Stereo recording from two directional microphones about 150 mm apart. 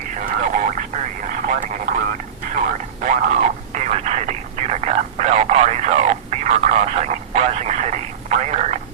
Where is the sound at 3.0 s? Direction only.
55° right (ahead or behind).